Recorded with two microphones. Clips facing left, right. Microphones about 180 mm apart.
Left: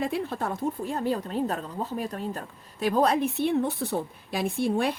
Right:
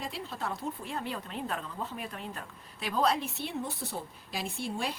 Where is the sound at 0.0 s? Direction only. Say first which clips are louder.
Left 9 dB; 55° left (ahead or behind).